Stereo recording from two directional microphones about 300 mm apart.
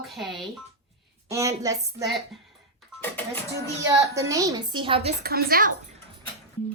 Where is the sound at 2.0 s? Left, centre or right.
Centre.